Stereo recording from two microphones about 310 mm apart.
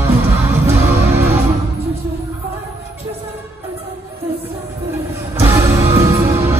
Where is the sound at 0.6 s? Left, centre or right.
Centre.